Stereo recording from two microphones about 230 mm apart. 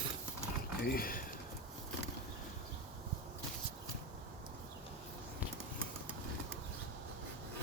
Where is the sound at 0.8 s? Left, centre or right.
Left.